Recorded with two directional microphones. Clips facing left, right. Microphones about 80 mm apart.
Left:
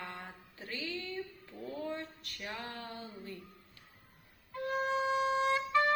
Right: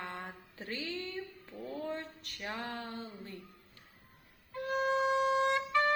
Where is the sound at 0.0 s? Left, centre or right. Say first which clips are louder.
Right 2 dB; right.